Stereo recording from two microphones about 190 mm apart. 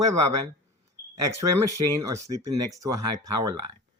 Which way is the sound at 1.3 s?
15° right (ahead or behind).